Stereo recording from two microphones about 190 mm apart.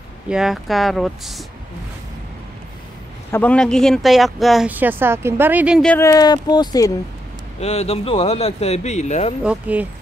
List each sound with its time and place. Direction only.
0.3 s speech: centre (ahead or behind)
3.3 s speech: 10° left (ahead or behind); by 5.8 s 10° right (ahead or behind)
5.8 s speech: 5° left (ahead or behind)
6.0 s speech: 20° left (ahead or behind)
7.6 s speech: 35° left (ahead or behind)
9.4 s speech: 5° right (ahead or behind)